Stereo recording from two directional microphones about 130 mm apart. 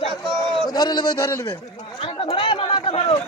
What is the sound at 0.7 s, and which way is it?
Speech, 30° left (ahead or behind).